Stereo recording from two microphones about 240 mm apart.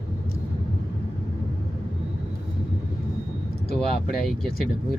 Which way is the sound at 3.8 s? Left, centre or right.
Centre.